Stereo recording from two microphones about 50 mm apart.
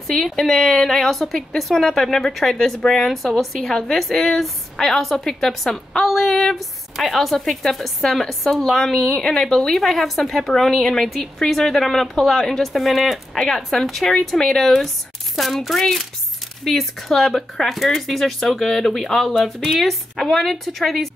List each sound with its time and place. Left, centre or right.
0.0 s a woman's voice: centre
3.1 s a woman's voice: centre